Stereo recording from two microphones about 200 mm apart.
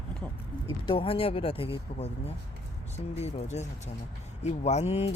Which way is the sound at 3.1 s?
30° left (ahead or behind).